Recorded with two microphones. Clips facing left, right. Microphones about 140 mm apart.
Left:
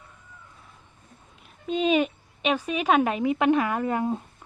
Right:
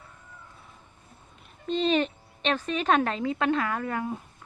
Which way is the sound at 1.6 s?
10° left (ahead or behind).